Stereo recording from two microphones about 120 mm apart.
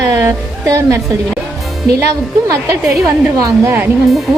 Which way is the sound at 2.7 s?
25° right (ahead or behind).